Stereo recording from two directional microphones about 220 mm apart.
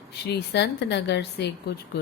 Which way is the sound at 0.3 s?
50° left (ahead or behind).